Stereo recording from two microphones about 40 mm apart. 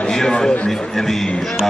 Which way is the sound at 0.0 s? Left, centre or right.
Centre.